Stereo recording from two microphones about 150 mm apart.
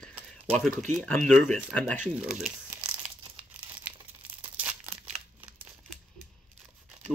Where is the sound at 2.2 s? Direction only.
5° right (ahead or behind).